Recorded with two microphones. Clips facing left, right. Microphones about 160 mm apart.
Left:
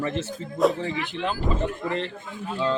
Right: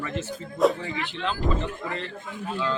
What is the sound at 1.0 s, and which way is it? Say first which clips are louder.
Speech: left 2 dB; 15° left (ahead or behind).